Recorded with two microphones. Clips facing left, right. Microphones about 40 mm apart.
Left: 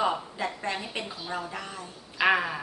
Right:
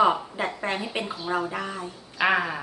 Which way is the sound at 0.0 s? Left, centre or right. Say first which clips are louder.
Right 6 dB; right.